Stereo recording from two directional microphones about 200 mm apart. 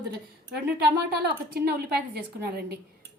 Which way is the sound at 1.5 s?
50° right (ahead or behind).